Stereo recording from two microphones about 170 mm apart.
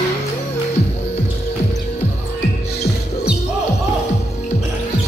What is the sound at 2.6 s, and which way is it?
Music, 70° left (ahead or behind).